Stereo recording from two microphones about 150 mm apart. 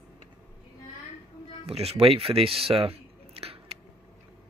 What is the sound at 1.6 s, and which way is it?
Speech, 45° right (ahead or behind).